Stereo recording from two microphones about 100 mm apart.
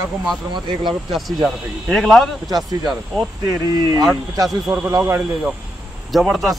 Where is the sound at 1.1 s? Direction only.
Centre (ahead or behind).